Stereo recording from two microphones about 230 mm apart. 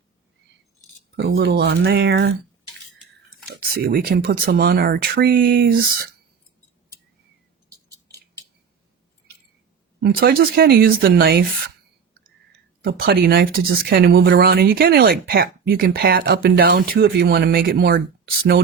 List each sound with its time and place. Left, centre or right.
1.1 s speech: right
3.8 s speech: right
10.0 s speech: right
12.8 s speech: right